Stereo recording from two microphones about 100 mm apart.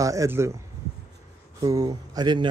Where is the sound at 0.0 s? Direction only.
35° right (ahead or behind).